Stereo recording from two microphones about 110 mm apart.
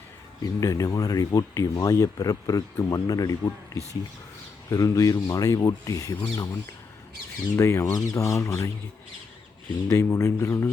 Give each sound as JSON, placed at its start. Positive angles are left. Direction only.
{"t": 0.6, "sound": "speech", "side_deg": 30}
{"t": 7.5, "sound": "speech", "side_deg": 25}
{"t": 9.9, "sound": "speech", "side_deg": 25}